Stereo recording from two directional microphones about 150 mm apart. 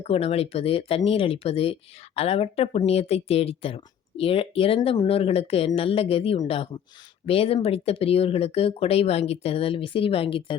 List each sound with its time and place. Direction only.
0.0 s speech: 40° left (ahead or behind)